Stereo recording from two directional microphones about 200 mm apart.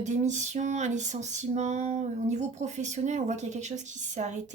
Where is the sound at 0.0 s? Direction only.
35° right (ahead or behind).